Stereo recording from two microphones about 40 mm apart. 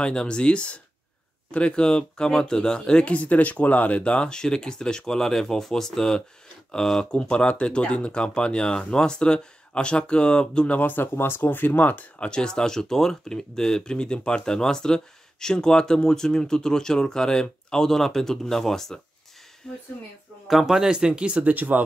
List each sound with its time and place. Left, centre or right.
0.0 s speech: left
3.2 s speech: left
4.3 s speech: centre
10.8 s speech: left
11.1 s speech: left
12.2 s speech: left
19.6 s speech: left
20.4 s speech: centre; by 21.5 s right
21.5 s speech: right